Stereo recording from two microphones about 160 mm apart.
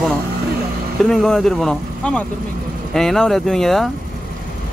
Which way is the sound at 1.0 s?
5° left (ahead or behind).